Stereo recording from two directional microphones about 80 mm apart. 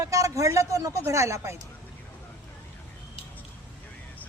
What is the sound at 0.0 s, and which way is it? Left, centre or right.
Speech, right.